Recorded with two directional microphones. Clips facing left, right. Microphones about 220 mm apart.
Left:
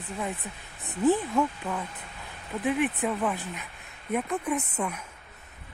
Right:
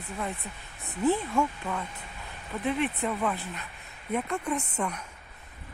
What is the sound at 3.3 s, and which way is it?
Speech, 15° left (ahead or behind).